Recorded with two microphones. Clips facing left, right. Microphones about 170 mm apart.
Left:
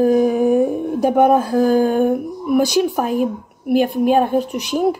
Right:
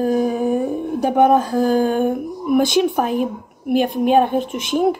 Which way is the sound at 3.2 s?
5° left (ahead or behind).